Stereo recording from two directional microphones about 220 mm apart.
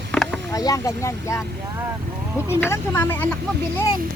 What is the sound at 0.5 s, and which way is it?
Speech, 15° left (ahead or behind).